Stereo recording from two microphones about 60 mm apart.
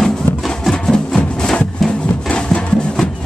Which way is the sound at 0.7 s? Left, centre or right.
Centre.